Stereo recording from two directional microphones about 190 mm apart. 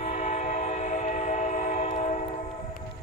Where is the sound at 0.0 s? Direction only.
35° left (ahead or behind).